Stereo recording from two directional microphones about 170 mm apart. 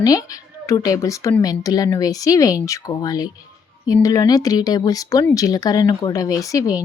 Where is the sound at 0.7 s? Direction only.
20° left (ahead or behind).